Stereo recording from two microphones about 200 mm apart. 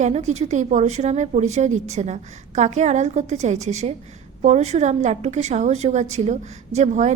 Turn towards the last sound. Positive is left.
turn(degrees=-35)  # may be behind; listen again after turning